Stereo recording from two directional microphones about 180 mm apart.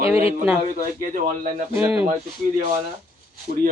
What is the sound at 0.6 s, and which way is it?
Speech, 50° right (ahead or behind).